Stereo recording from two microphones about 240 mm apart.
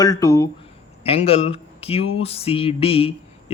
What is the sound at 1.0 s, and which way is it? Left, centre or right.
A man's voice, left.